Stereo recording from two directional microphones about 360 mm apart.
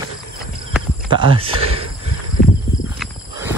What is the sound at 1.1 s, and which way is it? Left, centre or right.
Speech, centre.